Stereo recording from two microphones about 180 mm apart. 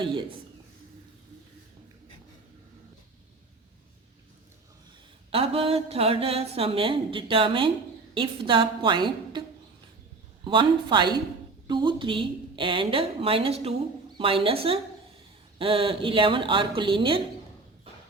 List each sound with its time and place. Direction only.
0.0 s a woman's voice: 30° right (ahead or behind)
5.3 s a woman's voice: 30° right (ahead or behind)
10.4 s a woman's voice: 25° right (ahead or behind)